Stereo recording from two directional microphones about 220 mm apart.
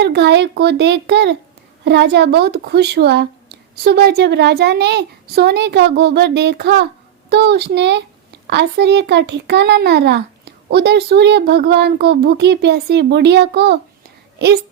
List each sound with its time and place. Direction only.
0.0 s a child's voice: 50° right (ahead or behind)